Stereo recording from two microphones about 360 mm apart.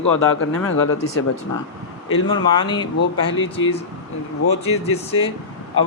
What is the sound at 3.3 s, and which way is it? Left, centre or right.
Speech, left.